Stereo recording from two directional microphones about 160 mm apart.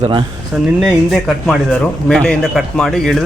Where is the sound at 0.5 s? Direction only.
5° right (ahead or behind).